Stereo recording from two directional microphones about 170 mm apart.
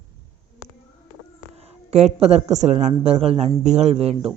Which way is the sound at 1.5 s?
35° right (ahead or behind).